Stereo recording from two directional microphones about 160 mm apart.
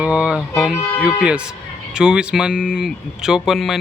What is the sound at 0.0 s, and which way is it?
Speech, 5° right (ahead or behind).